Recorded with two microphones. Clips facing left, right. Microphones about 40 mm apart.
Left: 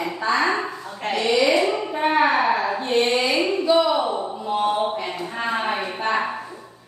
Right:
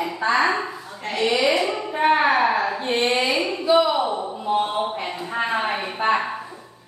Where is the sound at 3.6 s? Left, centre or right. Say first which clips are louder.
Right 2 dB; centre.